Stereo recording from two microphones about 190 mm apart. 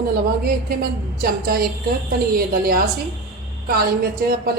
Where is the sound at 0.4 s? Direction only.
50° right (ahead or behind).